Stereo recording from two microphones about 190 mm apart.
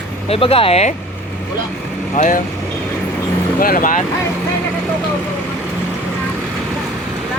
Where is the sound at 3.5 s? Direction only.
50° left (ahead or behind).